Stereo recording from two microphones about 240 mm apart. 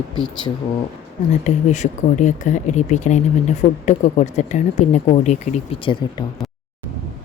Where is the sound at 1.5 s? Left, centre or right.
Left.